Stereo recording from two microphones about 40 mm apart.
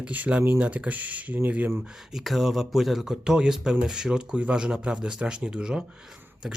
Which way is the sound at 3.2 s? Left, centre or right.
Centre.